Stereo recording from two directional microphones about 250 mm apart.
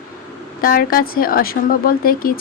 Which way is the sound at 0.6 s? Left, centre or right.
Left.